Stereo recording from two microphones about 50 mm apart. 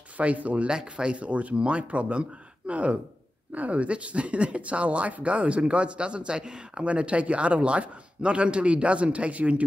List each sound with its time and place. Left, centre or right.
0.2 s speech: right
0.7 s speech: centre